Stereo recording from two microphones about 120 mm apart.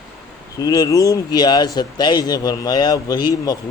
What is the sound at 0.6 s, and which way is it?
Speech, 30° left (ahead or behind).